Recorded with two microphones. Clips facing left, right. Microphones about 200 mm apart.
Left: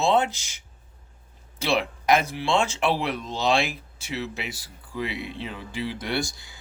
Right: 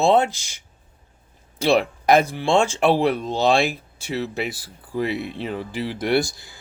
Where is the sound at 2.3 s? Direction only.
50° right (ahead or behind).